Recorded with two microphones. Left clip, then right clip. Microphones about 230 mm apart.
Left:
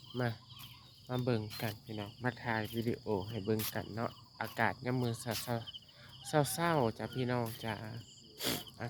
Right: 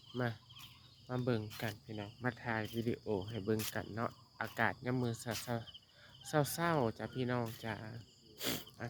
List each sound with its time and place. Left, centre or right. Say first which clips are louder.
0.1 s speech: left 2 dB; centre